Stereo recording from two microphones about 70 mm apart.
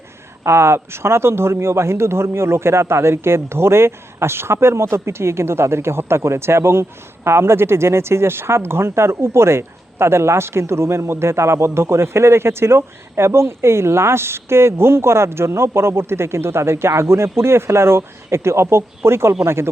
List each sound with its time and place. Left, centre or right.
0.4 s speech: right